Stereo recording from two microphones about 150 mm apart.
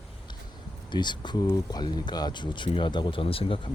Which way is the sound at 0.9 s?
30° left (ahead or behind).